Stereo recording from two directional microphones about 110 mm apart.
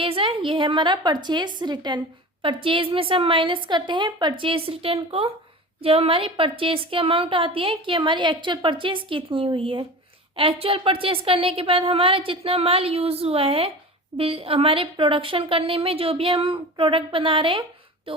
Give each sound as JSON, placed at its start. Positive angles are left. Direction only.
{"t": 0.0, "sound": "a woman's voice", "side_deg": -55}
{"t": 2.4, "sound": "a woman's voice", "side_deg": -50}